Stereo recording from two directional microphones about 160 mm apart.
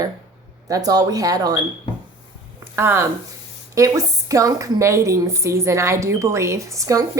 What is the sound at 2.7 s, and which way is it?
A woman's voice, 15° right (ahead or behind).